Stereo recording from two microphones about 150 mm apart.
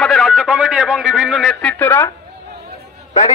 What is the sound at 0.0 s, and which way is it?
A man's voice, centre (ahead or behind).